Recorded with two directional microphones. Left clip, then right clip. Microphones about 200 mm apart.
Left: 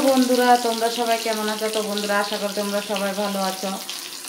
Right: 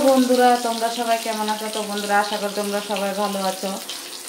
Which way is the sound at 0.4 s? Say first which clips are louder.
Even; 5° left (ahead or behind).